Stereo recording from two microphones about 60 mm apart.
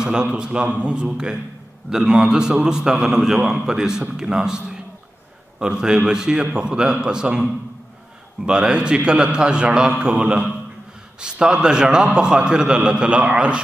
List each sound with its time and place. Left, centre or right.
0.0 s a man's voice: centre